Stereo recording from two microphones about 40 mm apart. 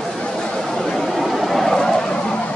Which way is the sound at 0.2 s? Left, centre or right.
Left.